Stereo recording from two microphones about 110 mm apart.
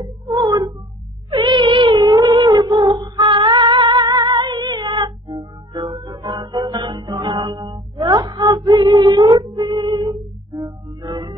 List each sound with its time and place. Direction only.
0.0 s music: 35° right (ahead or behind)
1.3 s cat: 45° right (ahead or behind)
2.0 s female singing: 30° right (ahead or behind)
4.1 s music: 45° right (ahead or behind)